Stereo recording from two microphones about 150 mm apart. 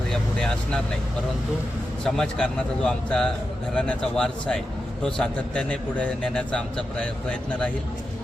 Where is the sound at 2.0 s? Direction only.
5° left (ahead or behind).